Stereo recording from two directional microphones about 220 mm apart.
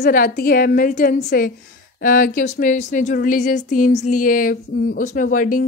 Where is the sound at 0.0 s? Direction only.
40° left (ahead or behind).